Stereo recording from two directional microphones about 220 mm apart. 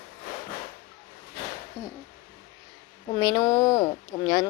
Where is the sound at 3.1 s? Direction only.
20° left (ahead or behind).